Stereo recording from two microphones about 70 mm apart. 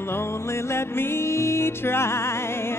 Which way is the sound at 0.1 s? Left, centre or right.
Left.